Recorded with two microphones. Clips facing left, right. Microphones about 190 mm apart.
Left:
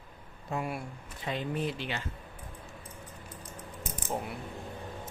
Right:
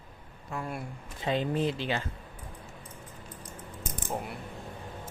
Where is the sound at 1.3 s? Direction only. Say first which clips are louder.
Right 5 dB; 30° right (ahead or behind).